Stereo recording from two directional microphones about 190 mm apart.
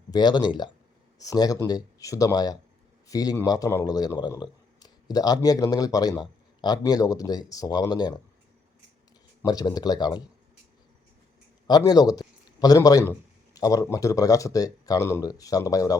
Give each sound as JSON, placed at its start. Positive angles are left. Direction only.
{"t": 0.1, "sound": "speech", "side_deg": 20}
{"t": 9.4, "sound": "speech", "side_deg": 20}
{"t": 11.7, "sound": "a man's voice", "side_deg": 20}